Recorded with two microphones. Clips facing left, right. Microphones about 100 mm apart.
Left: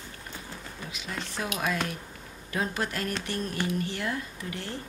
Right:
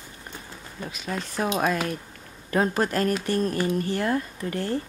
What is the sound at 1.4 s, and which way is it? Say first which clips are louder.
Speech: right 6 dB; 45° right (ahead or behind).